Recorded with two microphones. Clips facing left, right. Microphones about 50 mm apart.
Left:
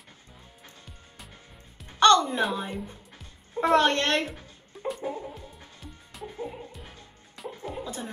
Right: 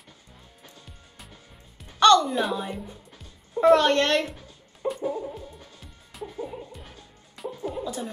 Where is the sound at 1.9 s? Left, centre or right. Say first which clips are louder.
Right 2 dB; left.